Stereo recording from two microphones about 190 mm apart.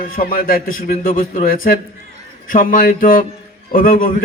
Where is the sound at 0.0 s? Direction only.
50° left (ahead or behind).